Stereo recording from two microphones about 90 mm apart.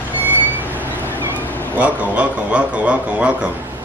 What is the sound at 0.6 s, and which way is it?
Vehicle, 20° right (ahead or behind).